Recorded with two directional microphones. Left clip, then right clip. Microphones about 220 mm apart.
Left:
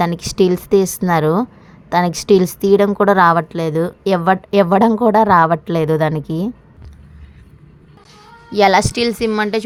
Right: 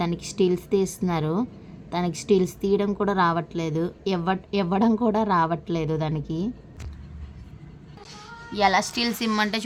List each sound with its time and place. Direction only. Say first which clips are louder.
0.0 s a woman's voice: left 9 dB; 30° left (ahead or behind)
8.5 s a woman's voice: left 9 dB; 30° left (ahead or behind)